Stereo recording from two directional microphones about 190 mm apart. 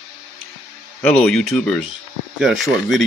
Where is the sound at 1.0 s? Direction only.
5° left (ahead or behind).